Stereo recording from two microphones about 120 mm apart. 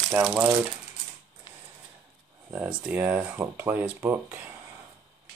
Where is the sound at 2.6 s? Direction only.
10° right (ahead or behind).